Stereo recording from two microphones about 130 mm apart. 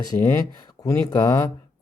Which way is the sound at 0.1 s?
40° left (ahead or behind).